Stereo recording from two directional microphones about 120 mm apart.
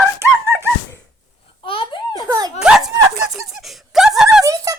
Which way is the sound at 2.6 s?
5° right (ahead or behind).